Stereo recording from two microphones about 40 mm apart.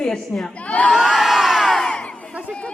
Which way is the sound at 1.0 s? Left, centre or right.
Centre.